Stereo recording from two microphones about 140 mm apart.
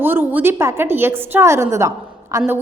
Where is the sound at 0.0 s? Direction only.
15° right (ahead or behind).